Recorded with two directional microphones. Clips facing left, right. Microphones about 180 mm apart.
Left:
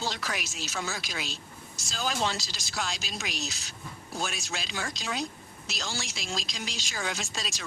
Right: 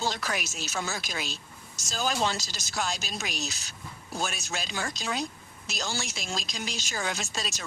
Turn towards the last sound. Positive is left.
turn(degrees=-45)  # may be behind; listen again after turning